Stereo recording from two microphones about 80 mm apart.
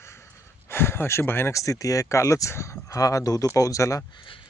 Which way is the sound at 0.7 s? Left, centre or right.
Left.